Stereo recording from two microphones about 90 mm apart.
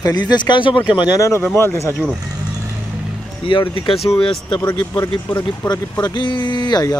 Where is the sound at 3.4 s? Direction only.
75° left (ahead or behind).